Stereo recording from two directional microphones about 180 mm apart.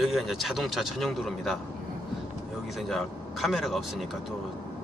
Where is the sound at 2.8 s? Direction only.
Centre (ahead or behind).